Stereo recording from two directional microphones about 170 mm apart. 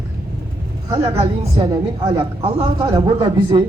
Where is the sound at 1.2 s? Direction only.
35° right (ahead or behind).